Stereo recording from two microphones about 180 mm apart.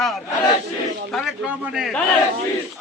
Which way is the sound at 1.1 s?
Centre (ahead or behind).